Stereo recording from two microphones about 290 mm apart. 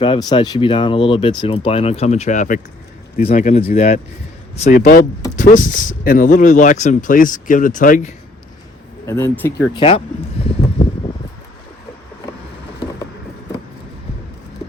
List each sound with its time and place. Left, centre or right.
0.0 s speech: centre
9.0 s speech: centre